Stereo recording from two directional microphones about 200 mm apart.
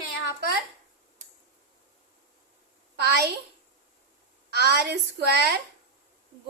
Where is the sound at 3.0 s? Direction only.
55° right (ahead or behind).